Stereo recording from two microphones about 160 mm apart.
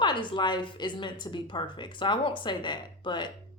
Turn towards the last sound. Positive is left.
turn(degrees=30)  # may be behind; listen again after turning